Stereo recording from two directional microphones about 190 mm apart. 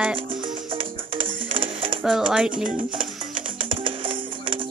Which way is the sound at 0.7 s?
25° right (ahead or behind).